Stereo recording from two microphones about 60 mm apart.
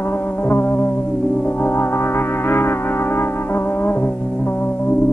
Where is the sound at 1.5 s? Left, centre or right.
Left.